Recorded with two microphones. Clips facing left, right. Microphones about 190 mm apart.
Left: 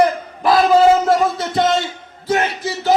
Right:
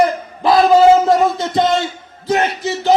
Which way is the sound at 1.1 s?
25° right (ahead or behind).